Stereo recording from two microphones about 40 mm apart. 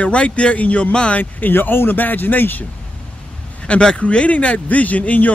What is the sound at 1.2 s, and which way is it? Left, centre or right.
Speech, left.